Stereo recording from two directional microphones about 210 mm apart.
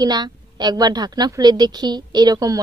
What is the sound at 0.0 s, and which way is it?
A woman's voice, 20° right (ahead or behind).